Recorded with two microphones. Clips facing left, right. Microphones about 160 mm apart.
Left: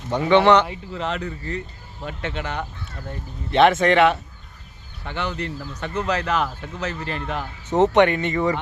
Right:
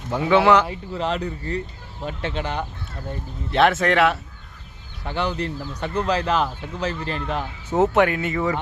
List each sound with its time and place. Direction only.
0.1 s speech: 5° right (ahead or behind)
0.7 s speech: 35° right (ahead or behind)
3.5 s speech: centre (ahead or behind)
5.0 s speech: 35° right (ahead or behind)
7.8 s speech: 5° right (ahead or behind)